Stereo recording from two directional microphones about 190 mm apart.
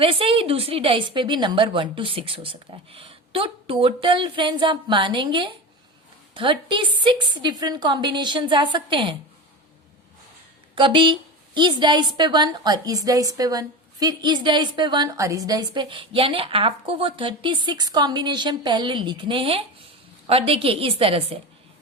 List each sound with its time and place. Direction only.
0.0 s a woman's voice: 30° right (ahead or behind)
10.8 s a woman's voice: 25° right (ahead or behind)